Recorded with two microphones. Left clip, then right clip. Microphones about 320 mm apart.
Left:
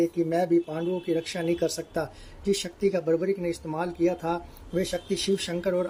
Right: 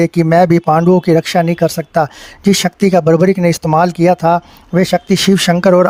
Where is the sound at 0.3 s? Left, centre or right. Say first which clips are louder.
Right 15 dB; right.